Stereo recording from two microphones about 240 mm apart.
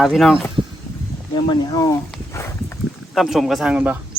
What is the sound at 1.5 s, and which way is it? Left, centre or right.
Speech, centre.